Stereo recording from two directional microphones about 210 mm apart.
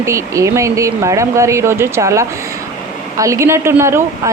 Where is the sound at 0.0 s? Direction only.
15° right (ahead or behind).